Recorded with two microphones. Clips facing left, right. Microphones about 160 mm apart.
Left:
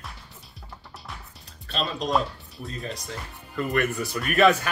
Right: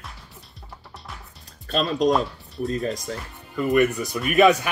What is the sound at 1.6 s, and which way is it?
Speech, 45° right (ahead or behind).